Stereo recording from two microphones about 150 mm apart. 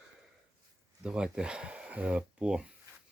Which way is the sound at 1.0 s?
5° right (ahead or behind).